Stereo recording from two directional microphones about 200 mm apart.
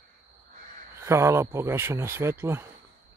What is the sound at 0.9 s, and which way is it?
Speech, 15° right (ahead or behind).